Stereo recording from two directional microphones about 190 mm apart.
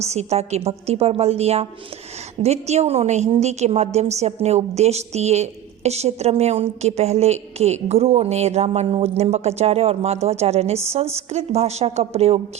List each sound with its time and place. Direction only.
0.1 s a woman's voice: 35° right (ahead or behind)